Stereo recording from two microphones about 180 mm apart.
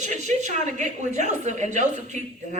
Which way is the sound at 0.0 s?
40° right (ahead or behind).